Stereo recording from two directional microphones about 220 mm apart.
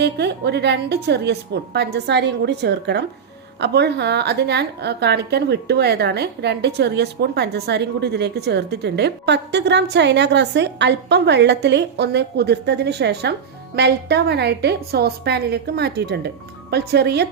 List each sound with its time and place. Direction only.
0.0 s a woman's voice: 50° right (ahead or behind)